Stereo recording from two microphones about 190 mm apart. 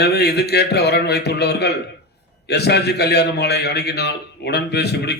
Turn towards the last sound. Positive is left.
turn(degrees=60)  # may be behind; listen again after turning